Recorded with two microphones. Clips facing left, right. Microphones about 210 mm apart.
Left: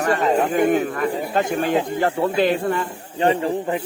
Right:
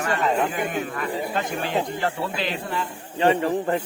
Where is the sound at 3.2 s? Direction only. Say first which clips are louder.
Left 1 dB; 30° left (ahead or behind).